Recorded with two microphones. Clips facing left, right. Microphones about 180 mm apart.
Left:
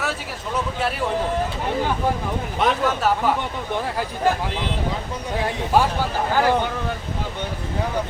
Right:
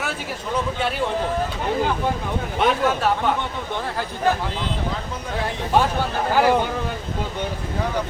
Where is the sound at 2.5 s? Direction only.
Centre (ahead or behind).